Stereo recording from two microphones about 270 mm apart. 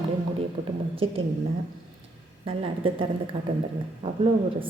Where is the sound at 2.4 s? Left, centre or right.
Right.